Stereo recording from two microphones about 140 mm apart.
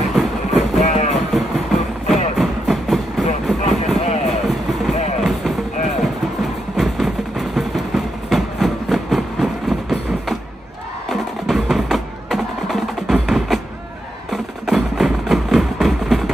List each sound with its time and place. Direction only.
0.1 s music: centre (ahead or behind)
0.8 s music: 55° left (ahead or behind)
1.3 s music: centre (ahead or behind)
4.0 s a sound: 55° left (ahead or behind)
4.5 s vehicle: centre (ahead or behind)
5.2 s music: centre (ahead or behind)